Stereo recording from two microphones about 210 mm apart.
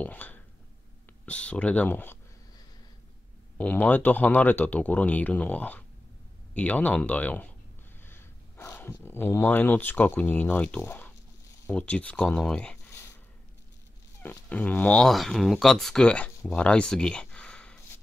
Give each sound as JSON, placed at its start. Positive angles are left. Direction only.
{"t": 0.0, "sound": "speech", "side_deg": 10}
{"t": 3.5, "sound": "speech", "side_deg": 5}
{"t": 14.2, "sound": "speech", "side_deg": 10}